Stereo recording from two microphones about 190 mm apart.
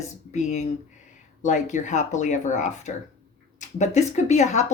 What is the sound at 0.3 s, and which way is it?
Speech, 40° left (ahead or behind).